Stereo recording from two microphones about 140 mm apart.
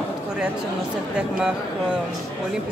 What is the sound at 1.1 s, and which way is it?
Speech, 5° right (ahead or behind).